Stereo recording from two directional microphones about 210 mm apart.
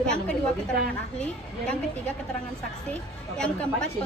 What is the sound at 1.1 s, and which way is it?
A woman's voice, 5° left (ahead or behind).